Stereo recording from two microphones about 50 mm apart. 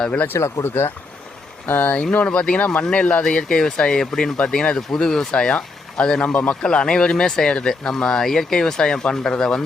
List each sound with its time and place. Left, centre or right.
0.3 s speech: left
1.6 s speech: left
2.0 s speech: left
3.2 s speech: centre
6.2 s speech: left
6.6 s speech: centre